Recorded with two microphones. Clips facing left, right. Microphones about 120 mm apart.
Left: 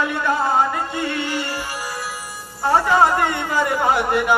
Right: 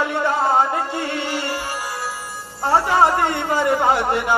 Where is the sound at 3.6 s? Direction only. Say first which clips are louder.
Right 1 dB; 20° right (ahead or behind).